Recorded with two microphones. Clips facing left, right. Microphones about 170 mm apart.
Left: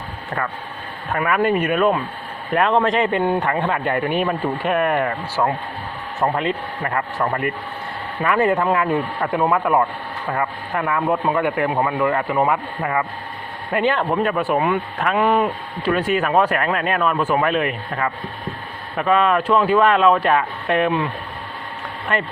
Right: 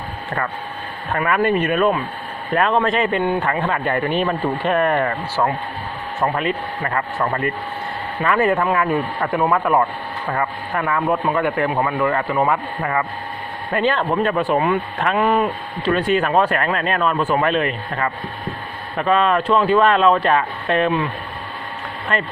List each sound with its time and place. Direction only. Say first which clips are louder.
1.1 s speech: even; 15° left (ahead or behind)